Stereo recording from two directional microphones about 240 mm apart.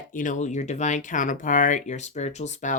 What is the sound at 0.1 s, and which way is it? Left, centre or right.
Speech, left.